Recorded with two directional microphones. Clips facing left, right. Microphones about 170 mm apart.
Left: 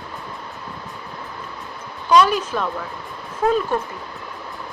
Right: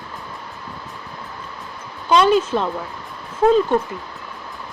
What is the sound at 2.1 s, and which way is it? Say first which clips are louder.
Speech: right 1 dB; 25° right (ahead or behind).